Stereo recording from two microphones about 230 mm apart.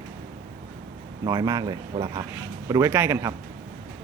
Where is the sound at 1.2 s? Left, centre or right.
Centre.